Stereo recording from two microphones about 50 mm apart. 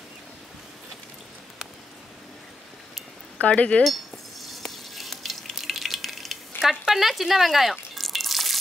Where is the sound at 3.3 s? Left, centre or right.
Left.